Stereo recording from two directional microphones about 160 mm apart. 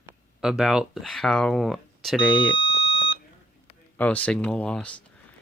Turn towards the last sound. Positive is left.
turn(degrees=5)  # may be behind; listen again after turning